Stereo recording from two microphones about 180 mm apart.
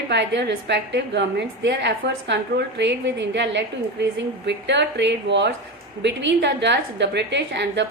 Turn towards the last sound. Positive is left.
turn(degrees=-80)